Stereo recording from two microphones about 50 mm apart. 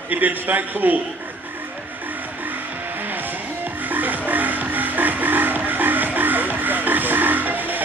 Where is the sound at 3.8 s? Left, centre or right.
Right.